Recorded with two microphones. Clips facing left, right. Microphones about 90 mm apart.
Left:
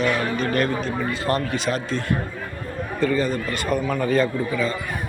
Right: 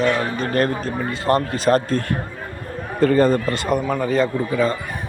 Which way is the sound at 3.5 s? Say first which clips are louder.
Right 3 dB; 20° right (ahead or behind).